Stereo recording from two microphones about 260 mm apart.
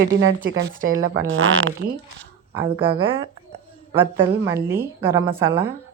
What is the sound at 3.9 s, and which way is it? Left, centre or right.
A woman's voice, centre.